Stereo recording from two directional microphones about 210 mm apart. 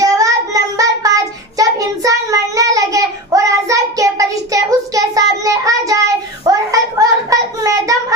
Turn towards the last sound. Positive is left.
turn(degrees=-15)  # may be behind; listen again after turning